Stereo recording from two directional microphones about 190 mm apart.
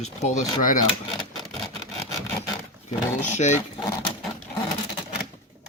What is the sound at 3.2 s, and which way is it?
Speech, 40° left (ahead or behind).